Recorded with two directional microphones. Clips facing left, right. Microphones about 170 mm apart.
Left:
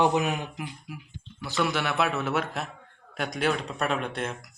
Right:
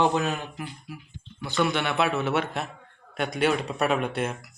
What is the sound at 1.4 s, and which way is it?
Speech, centre (ahead or behind).